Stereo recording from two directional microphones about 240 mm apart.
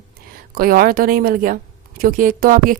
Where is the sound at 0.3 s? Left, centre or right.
Right.